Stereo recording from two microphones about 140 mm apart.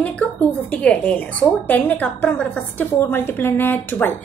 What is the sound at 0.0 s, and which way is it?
A woman's voice, 10° left (ahead or behind).